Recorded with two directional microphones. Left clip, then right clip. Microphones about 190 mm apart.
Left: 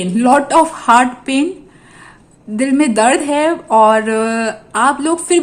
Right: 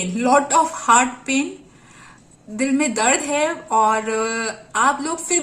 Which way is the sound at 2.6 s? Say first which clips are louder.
Left 7 dB; 40° left (ahead or behind).